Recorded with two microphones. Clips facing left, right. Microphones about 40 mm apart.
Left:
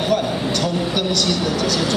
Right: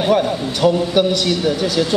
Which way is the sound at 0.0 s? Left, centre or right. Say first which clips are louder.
Right 3 dB; centre.